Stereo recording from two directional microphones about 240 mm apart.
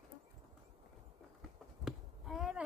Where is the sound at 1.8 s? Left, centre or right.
Centre.